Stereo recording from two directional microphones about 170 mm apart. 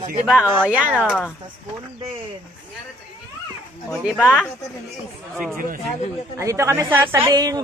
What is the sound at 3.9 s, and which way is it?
Speech, 5° right (ahead or behind).